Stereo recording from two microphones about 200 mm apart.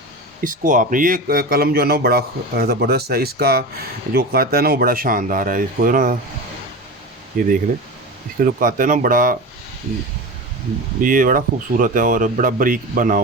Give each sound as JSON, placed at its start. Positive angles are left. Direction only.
{"t": 0.4, "sound": "a man's voice", "side_deg": -40}
{"t": 7.3, "sound": "a man's voice", "side_deg": -40}
{"t": 11.0, "sound": "a man's voice", "side_deg": -45}